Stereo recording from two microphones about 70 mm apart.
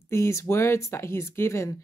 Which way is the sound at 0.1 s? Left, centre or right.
Left.